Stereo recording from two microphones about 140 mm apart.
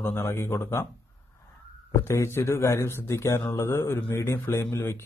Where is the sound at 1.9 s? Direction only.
20° left (ahead or behind).